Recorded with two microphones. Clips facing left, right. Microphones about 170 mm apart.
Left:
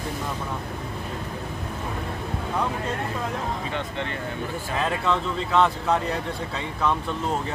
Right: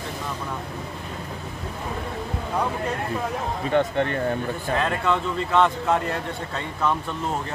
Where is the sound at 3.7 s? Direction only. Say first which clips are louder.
Right 9 dB; 50° right (ahead or behind).